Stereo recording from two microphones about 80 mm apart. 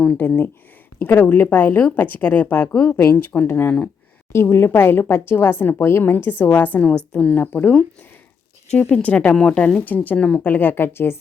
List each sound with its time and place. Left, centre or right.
0.2 s speech: left
8.9 s speech: centre